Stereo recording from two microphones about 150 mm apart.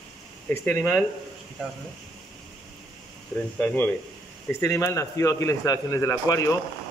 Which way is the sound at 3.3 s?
10° left (ahead or behind).